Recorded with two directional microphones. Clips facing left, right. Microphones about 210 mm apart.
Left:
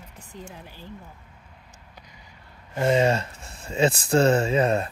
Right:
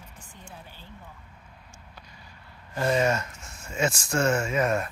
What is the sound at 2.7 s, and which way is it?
Speech, 25° left (ahead or behind).